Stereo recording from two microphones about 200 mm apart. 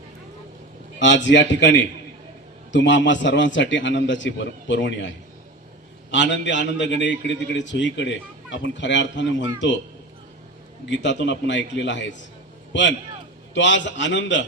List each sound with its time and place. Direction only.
0.9 s a man's voice: 65° left (ahead or behind)
10.8 s a man's voice: 60° left (ahead or behind)
13.5 s a man's voice: 65° left (ahead or behind)